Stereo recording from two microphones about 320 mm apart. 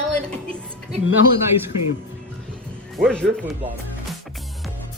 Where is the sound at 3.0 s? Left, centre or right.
Centre.